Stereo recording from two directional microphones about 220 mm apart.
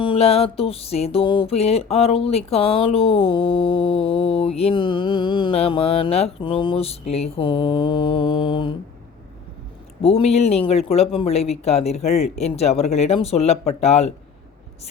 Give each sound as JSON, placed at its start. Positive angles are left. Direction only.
{"t": 0.0, "sound": "music", "side_deg": 25}
{"t": 10.0, "sound": "music", "side_deg": 25}